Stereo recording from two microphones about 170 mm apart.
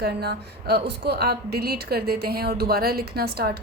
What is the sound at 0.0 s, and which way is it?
A woman's voice, 70° right (ahead or behind).